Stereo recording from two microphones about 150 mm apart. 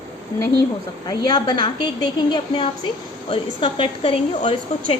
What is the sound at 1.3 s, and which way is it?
A woman's voice, 30° left (ahead or behind).